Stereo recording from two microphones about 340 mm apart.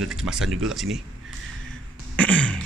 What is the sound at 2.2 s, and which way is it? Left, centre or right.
Throat clearing, centre.